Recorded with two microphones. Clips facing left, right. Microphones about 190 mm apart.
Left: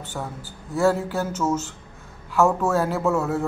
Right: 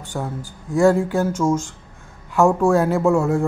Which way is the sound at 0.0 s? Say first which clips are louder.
Right 5 dB; 10° right (ahead or behind).